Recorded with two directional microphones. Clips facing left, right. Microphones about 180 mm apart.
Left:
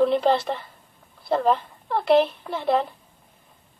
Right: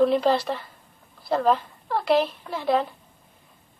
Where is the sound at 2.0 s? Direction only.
25° left (ahead or behind).